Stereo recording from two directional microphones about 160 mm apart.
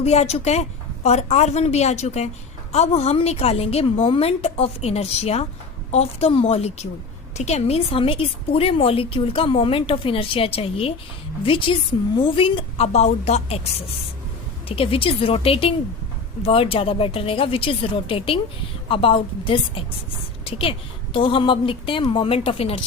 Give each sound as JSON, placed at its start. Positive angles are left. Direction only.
{"t": 0.0, "sound": "a woman's voice", "side_deg": 40}
{"t": 14.7, "sound": "a woman's voice", "side_deg": 35}